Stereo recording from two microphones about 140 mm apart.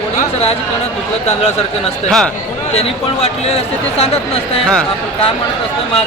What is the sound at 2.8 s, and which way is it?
Speech, 45° left (ahead or behind).